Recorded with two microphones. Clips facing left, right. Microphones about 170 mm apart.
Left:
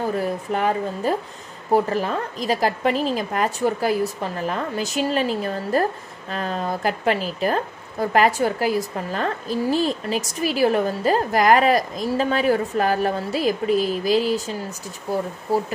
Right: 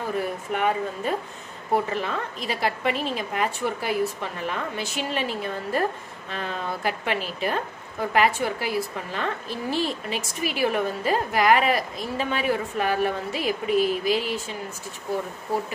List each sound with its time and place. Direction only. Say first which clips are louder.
0.5 s a woman's voice: left 1 dB; 35° left (ahead or behind)